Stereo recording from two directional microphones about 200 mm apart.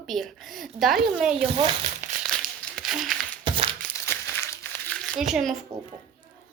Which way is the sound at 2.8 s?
Centre (ahead or behind).